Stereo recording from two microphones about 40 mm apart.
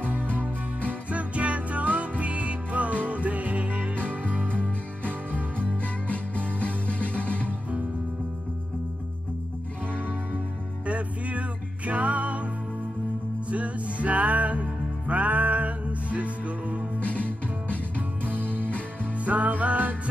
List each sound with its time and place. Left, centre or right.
1.1 s music: right
4.6 s music: left
10.9 s music: right
13.5 s music: right
17.0 s music: left
18.2 s music: right
18.5 s music: left
19.1 s music: right